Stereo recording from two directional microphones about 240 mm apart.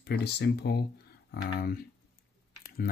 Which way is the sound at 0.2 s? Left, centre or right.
Left.